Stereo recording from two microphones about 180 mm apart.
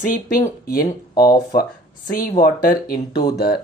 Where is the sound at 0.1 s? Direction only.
50° left (ahead or behind).